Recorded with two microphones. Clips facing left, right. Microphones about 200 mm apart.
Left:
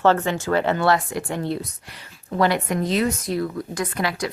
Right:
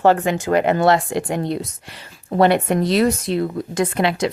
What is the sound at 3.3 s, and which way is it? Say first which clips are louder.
Speech: right 3 dB; 25° right (ahead or behind).